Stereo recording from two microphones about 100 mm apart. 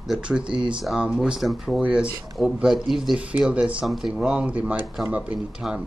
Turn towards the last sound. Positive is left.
turn(degrees=-5)  # may be behind; listen again after turning